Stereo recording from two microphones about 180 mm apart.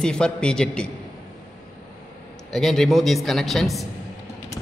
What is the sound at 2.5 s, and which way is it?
Speech, centre (ahead or behind).